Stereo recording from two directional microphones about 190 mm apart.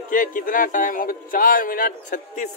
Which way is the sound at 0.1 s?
45° left (ahead or behind).